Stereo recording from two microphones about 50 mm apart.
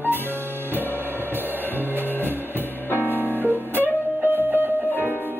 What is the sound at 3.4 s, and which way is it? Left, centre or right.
Music, right.